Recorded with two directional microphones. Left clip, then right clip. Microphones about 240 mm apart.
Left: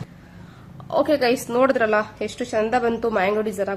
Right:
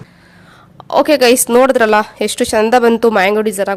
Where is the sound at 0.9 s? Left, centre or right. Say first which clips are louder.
Right 9 dB; right.